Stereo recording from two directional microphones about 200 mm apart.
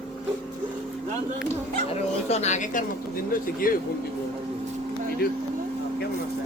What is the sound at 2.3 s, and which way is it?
Speech, 35° left (ahead or behind).